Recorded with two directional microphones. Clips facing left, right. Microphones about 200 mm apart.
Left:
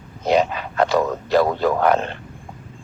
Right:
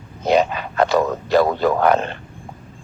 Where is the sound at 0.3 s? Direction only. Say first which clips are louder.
Right 1 dB; 55° right (ahead or behind).